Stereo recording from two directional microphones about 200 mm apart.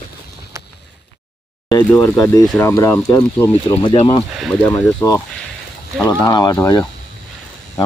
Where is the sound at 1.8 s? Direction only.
10° left (ahead or behind).